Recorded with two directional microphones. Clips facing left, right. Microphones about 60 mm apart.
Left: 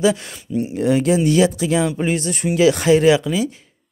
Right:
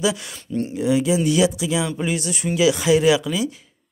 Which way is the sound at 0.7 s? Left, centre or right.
Left.